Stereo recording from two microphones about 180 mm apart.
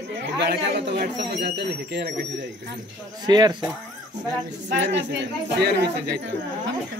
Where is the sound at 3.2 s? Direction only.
20° right (ahead or behind).